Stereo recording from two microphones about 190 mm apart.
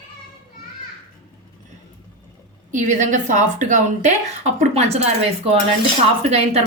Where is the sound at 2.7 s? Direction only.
40° right (ahead or behind).